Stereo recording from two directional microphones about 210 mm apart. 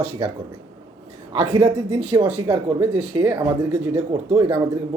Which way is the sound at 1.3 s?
25° right (ahead or behind).